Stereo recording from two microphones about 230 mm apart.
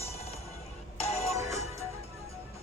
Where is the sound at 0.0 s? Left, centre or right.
Left.